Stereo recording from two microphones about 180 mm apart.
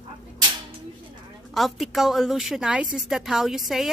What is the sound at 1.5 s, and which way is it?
A woman's voice, centre (ahead or behind).